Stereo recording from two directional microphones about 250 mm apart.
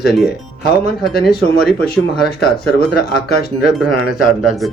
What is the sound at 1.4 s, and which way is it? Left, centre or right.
Speech, centre.